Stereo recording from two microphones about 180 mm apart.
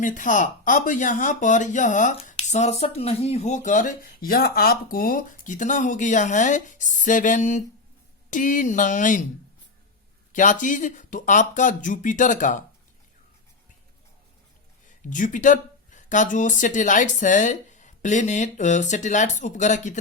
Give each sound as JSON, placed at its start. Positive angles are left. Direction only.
{"t": 0.0, "sound": "speech", "side_deg": 45}
{"t": 10.3, "sound": "speech", "side_deg": 45}
{"t": 15.1, "sound": "speech", "side_deg": 45}